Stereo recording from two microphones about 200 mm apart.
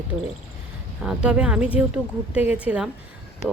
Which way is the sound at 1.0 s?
5° right (ahead or behind).